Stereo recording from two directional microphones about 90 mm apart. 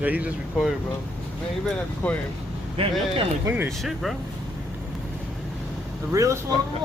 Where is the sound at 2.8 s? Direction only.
90° right.